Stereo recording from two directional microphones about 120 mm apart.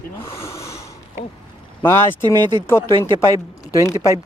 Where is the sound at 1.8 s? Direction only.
15° left (ahead or behind).